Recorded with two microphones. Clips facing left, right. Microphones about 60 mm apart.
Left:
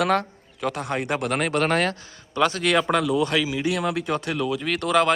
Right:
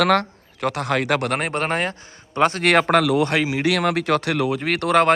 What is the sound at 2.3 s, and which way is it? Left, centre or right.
Speech, right.